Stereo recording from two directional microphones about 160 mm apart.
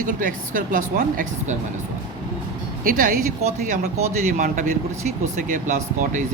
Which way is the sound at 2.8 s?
60° right (ahead or behind).